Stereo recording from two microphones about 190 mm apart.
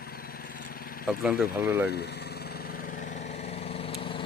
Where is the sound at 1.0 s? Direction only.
Centre (ahead or behind).